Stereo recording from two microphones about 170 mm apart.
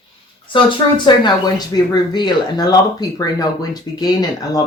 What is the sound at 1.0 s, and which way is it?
Speech, 25° left (ahead or behind).